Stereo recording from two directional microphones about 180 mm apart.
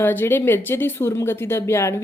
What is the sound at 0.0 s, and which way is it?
Speech, 10° left (ahead or behind).